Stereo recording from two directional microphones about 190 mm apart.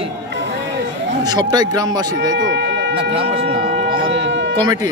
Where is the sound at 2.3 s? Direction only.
70° right (ahead or behind).